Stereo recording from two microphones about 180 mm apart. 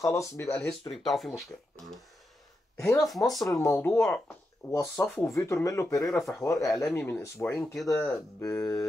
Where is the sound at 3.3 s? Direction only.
15° left (ahead or behind).